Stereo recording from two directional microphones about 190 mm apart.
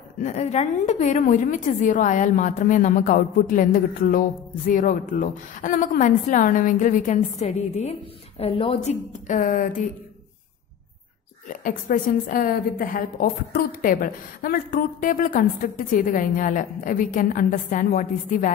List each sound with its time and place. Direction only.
0.2 s a woman's voice: 35° left (ahead or behind)
11.4 s a woman's voice: 45° left (ahead or behind)